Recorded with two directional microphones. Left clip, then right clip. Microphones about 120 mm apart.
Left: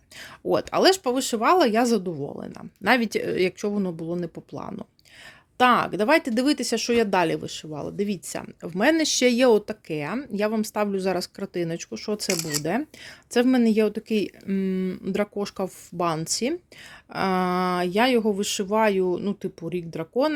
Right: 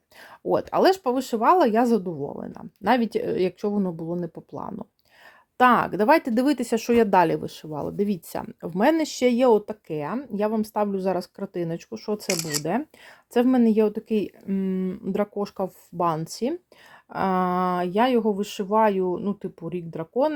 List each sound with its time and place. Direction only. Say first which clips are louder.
0.2 s speech: even; 5° left (ahead or behind)
9.0 s speech: left 1 dB; 15° left (ahead or behind)
9.8 s speech: even; 10° left (ahead or behind)